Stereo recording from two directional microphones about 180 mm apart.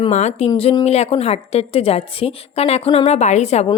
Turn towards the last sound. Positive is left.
turn(degrees=35)  # may be behind; listen again after turning